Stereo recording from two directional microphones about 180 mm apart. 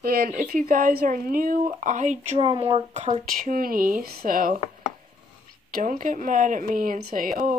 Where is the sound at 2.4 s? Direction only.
30° right (ahead or behind); by 4.6 s 50° right (ahead or behind).